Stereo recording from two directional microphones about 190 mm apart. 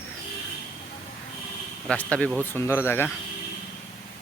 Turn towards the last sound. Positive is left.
turn(degrees=10)  # may be behind; listen again after turning